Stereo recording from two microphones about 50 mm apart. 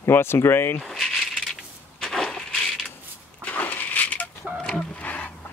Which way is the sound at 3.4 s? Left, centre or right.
Left.